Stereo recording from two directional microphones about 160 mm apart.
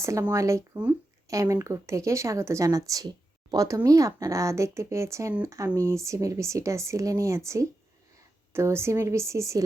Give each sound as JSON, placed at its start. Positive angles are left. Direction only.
{"t": 0.0, "sound": "a woman's voice", "side_deg": -20}